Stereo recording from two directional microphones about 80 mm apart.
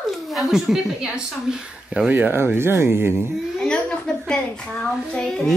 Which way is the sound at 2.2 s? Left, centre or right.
Right.